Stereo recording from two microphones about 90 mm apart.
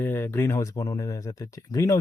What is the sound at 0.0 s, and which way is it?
Speech, 25° left (ahead or behind).